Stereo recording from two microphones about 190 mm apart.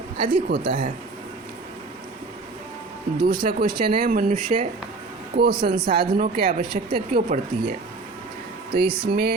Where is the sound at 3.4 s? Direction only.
55° right (ahead or behind).